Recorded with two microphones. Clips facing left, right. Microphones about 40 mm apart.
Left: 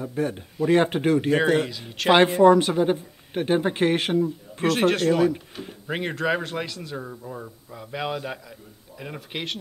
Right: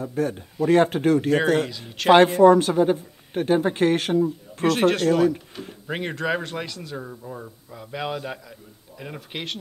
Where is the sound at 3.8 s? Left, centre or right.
Left.